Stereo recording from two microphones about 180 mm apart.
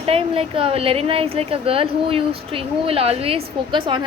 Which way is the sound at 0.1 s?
30° right (ahead or behind).